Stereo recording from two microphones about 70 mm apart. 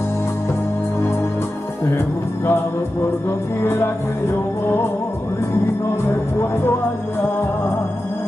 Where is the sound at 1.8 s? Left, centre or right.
Left.